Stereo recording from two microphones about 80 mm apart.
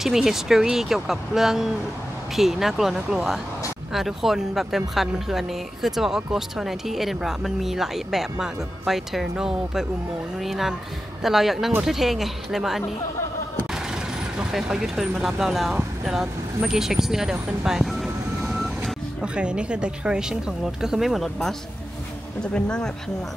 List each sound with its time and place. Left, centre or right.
0.0 s speech: centre
14.5 s speech: centre
18.4 s vehicle: centre
19.2 s speech: centre